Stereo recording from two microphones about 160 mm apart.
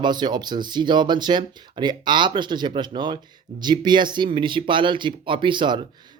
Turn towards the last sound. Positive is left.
turn(degrees=-30)  # may be behind; listen again after turning